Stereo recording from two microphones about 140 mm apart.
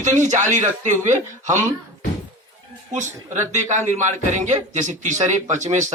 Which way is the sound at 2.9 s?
60° right (ahead or behind).